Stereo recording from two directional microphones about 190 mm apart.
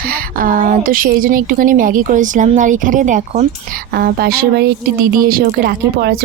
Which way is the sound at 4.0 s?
55° right (ahead or behind).